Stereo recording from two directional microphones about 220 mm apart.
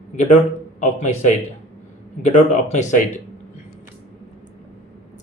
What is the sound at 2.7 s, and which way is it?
Speech, 35° left (ahead or behind).